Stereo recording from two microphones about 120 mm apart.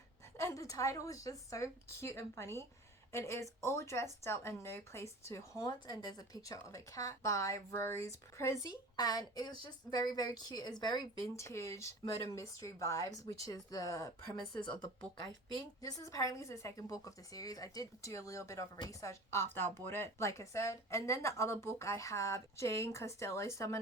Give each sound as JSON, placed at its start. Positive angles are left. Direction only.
{"t": 0.3, "sound": "a woman's voice", "side_deg": 25}
{"t": 11.3, "sound": "a woman's voice", "side_deg": 25}
{"t": 15.8, "sound": "speech", "side_deg": 30}